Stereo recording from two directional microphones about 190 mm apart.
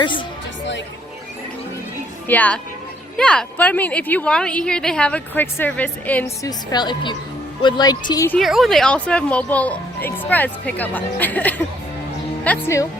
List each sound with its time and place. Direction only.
0.0 s a woman's voice: 25° left (ahead or behind)
2.2 s a woman's voice: 10° left (ahead or behind)
8.4 s a woman's voice: centre (ahead or behind); by 12.9 s 15° left (ahead or behind)